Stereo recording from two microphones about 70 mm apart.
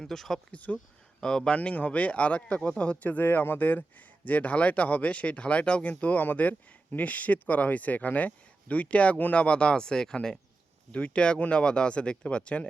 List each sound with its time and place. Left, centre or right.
0.0 s speech: centre
0.5 s speech: centre